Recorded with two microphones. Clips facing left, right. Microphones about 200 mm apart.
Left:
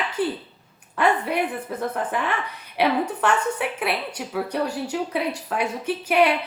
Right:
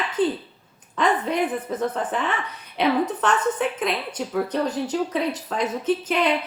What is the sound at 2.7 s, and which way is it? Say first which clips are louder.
A woman's voice: right 1 dB; 10° left (ahead or behind).